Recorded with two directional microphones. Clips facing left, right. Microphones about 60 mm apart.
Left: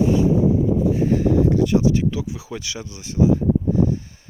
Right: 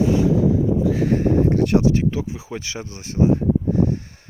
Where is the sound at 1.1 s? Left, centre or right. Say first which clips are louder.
Even; right.